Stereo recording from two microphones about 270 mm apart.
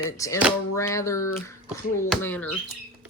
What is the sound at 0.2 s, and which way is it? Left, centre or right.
A woman's voice, centre.